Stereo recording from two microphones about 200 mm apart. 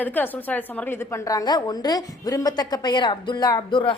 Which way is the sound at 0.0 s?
10° left (ahead or behind).